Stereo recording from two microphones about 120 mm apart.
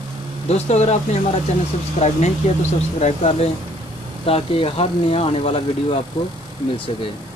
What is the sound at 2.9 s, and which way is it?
Speech, 65° left (ahead or behind).